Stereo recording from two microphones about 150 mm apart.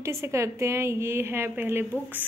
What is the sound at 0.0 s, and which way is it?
Speech, 20° right (ahead or behind).